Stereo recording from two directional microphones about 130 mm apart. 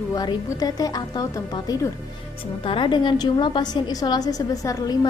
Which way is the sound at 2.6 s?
40° left (ahead or behind).